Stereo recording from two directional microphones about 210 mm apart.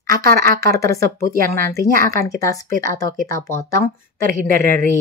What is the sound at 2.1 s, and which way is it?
Speech, 15° left (ahead or behind).